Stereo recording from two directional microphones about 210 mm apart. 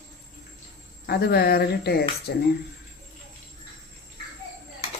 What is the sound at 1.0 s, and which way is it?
Speech, 50° left (ahead or behind).